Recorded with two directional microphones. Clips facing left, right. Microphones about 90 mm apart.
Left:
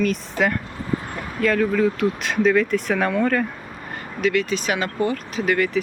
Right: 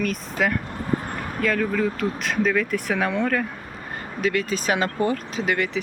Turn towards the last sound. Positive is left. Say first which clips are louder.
# left 3 dB
turn(degrees=-20)  # may be behind; listen again after turning